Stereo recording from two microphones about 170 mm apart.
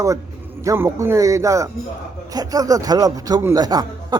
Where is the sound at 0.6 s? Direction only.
20° right (ahead or behind).